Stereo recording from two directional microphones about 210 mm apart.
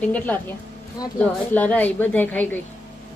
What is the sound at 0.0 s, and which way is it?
Speech, 5° left (ahead or behind).